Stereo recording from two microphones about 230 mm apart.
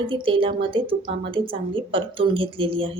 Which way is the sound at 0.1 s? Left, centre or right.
Right.